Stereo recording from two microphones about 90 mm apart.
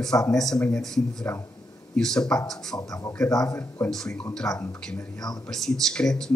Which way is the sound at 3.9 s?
10° left (ahead or behind).